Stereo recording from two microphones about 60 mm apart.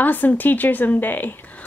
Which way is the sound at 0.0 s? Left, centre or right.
Left.